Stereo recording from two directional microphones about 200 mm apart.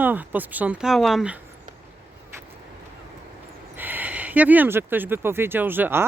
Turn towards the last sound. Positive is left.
turn(degrees=-10)  # may be behind; listen again after turning